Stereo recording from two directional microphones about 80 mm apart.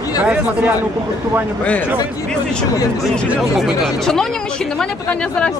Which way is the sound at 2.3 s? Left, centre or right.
Centre.